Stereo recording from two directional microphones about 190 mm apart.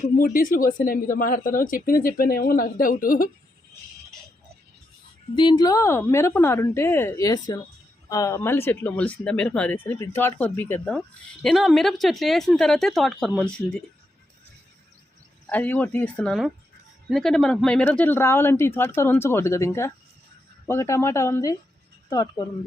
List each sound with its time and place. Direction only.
0.0 s speech: 50° left (ahead or behind)
5.3 s speech: 25° left (ahead or behind); by 13.6 s 5° left (ahead or behind)
15.4 s speech: 10° left (ahead or behind)